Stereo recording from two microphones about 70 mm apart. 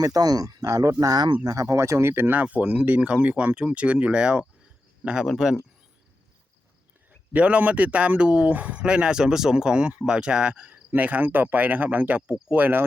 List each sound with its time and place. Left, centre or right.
0.0 s speech: right
1.5 s speech: right; by 4.4 s centre
5.2 s speech: centre
7.3 s speech: centre